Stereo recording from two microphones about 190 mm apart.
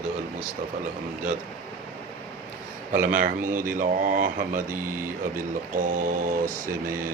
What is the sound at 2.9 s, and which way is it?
Speech, 45° right (ahead or behind).